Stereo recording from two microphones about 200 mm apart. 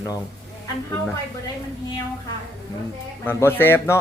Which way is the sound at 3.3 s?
10° left (ahead or behind).